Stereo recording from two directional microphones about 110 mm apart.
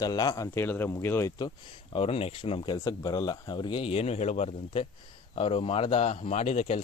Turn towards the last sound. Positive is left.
turn(degrees=85)